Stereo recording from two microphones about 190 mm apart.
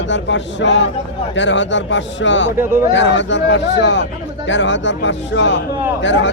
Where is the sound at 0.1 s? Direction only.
70° left (ahead or behind).